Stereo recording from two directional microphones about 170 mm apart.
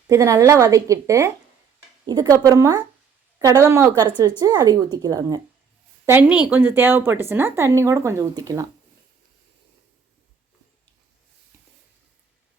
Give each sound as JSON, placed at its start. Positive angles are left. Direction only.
{"t": 0.1, "sound": "a woman's voice", "side_deg": -20}